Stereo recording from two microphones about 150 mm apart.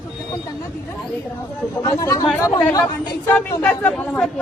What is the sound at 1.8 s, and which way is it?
Speech, 25° left (ahead or behind).